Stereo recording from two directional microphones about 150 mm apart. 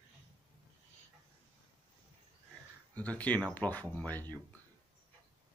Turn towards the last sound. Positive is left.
turn(degrees=10)  # may be behind; listen again after turning